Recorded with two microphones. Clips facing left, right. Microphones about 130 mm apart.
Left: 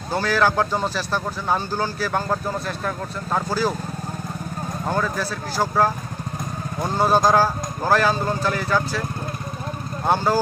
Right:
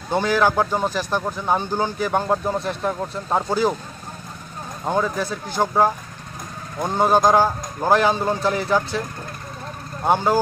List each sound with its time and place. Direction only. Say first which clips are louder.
0.1 s speech: right 2 dB; 20° right (ahead or behind)
4.8 s speech: right 3 dB; 20° right (ahead or behind)
10.0 s speech: right 1 dB; 15° right (ahead or behind)